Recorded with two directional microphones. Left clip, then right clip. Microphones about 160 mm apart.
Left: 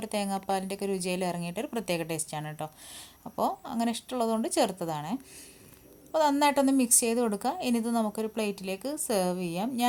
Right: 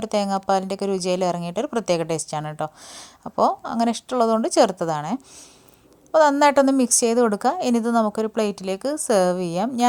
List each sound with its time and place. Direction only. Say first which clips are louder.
0.0 s a woman's voice: right 10 dB; 35° right (ahead or behind)